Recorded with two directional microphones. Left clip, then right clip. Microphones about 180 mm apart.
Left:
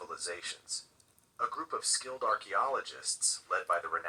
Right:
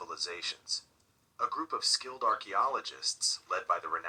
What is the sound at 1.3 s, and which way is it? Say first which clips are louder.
Speech: right 2 dB; 20° right (ahead or behind).